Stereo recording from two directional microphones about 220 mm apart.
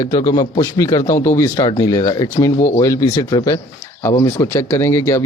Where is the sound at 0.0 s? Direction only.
20° left (ahead or behind).